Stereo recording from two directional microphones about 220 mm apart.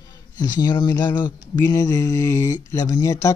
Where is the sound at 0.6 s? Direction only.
20° left (ahead or behind).